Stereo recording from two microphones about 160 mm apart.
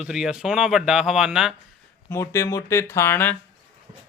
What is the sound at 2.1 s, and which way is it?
Speech, 20° left (ahead or behind).